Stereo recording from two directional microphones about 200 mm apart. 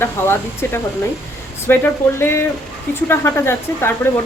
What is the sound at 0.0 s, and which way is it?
Speech, 10° left (ahead or behind).